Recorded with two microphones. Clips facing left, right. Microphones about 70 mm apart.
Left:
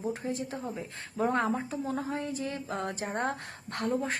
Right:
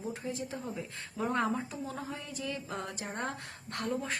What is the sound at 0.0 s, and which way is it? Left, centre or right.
A woman's voice, left.